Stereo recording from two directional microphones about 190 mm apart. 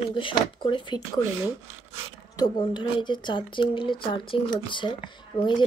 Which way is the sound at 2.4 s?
25° left (ahead or behind).